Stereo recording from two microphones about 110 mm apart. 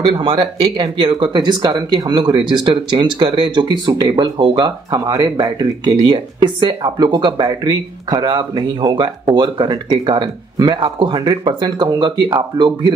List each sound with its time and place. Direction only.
0.1 s speech: 45° right (ahead or behind)